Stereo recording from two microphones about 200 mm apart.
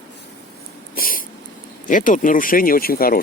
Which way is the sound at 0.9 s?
45° left (ahead or behind).